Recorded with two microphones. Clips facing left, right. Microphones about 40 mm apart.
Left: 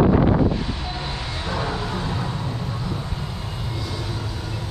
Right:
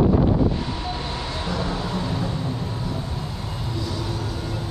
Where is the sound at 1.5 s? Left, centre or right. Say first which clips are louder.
Left 1 dB; left.